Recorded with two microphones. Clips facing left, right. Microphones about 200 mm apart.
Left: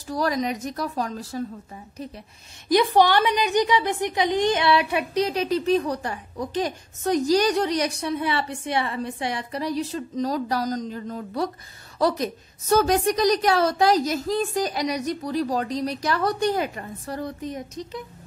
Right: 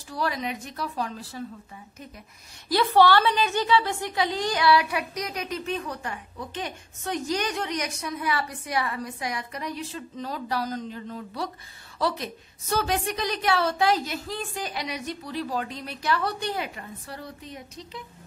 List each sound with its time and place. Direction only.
0.1 s a woman's voice: 40° left (ahead or behind)
2.7 s a woman's voice: 15° left (ahead or behind); by 18.0 s 45° left (ahead or behind)